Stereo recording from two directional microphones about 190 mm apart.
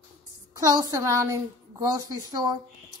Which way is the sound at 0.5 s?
15° right (ahead or behind).